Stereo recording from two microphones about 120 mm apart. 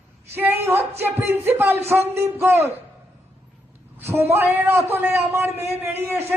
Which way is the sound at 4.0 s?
20° right (ahead or behind).